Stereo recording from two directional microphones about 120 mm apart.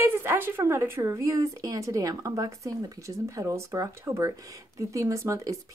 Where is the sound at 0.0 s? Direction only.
20° right (ahead or behind).